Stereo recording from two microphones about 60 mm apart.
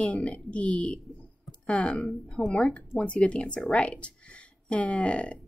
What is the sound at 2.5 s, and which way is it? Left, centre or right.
Speech, left.